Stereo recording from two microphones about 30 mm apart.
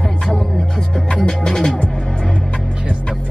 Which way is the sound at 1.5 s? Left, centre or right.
Centre.